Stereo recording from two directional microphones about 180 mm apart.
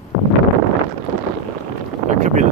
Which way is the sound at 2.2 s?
45° right (ahead or behind).